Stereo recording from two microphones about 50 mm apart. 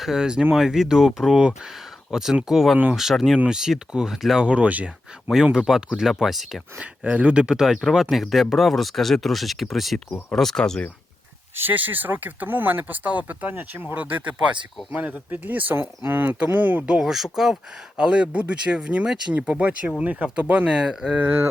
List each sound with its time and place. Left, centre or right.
0.0 s speech: centre
4.4 s speech: right
5.3 s speech: centre
7.0 s speech: right
7.6 s speech: centre
11.5 s speech: right
16.8 s speech: right
17.1 s speech: centre
17.9 s speech: right
20.7 s speech: centre
21.2 s speech: right